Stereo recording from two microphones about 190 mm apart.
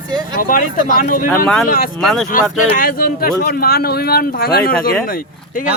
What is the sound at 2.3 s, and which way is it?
A man's voice, 45° left (ahead or behind).